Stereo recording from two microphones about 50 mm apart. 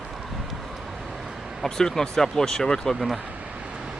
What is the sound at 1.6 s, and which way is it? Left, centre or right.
Speech, centre.